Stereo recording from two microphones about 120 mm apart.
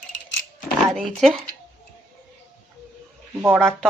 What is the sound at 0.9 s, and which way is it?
Speech, 5° left (ahead or behind).